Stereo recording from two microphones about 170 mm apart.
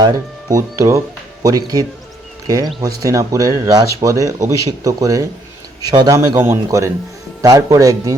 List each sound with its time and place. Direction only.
0.0 s a man's voice: 20° right (ahead or behind)